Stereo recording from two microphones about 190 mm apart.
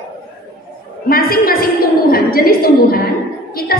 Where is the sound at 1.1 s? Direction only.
50° left (ahead or behind).